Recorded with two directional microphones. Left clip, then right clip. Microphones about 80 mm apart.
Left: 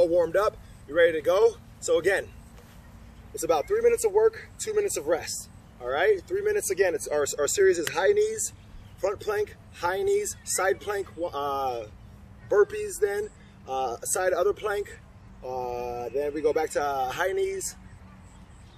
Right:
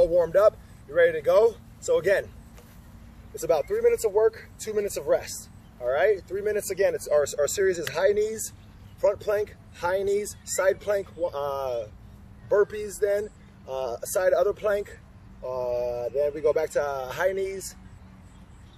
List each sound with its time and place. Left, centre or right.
0.0 s speech: left
3.3 s speech: left